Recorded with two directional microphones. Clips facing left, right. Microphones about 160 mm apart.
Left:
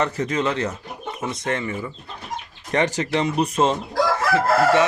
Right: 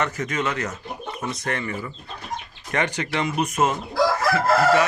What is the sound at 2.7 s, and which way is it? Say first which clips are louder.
Speech: left 4 dB; 40° left (ahead or behind).